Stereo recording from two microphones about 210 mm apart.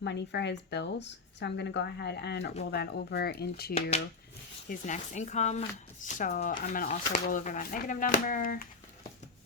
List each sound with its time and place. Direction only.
0.0 s speech: 55° left (ahead or behind)
3.8 s speech: 30° left (ahead or behind)